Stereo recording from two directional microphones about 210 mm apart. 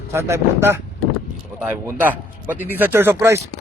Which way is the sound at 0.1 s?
10° right (ahead or behind).